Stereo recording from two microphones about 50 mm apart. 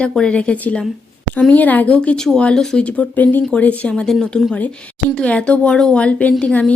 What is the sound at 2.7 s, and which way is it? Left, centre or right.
A woman's voice, left.